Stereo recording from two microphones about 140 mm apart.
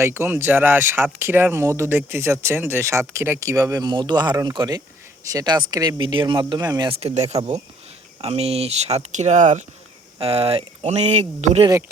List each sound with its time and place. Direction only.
0.0 s speech: 20° right (ahead or behind)
7.0 s speech: 50° right (ahead or behind)
10.2 s speech: 45° right (ahead or behind)